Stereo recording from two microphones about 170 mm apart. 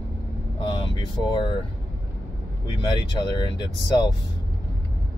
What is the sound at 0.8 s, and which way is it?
Speech, 25° left (ahead or behind).